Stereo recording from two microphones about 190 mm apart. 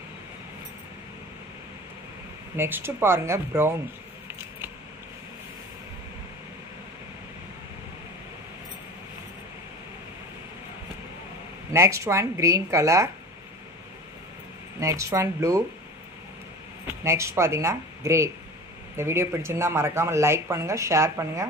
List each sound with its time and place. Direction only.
2.5 s speech: 10° right (ahead or behind)
11.7 s speech: 15° right (ahead or behind)
14.8 s speech: 15° right (ahead or behind)
16.8 s speech: 15° right (ahead or behind)